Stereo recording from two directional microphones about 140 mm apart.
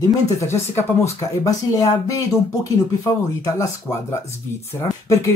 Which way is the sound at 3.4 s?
20° left (ahead or behind).